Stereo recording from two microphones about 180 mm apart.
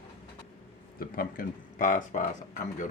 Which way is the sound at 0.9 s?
55° left (ahead or behind).